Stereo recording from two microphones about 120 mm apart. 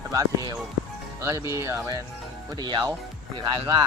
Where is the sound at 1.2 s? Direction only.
25° right (ahead or behind).